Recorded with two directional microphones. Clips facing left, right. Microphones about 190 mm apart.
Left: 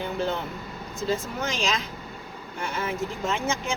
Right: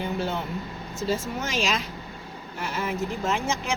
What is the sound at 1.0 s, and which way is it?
A woman's voice, 5° right (ahead or behind).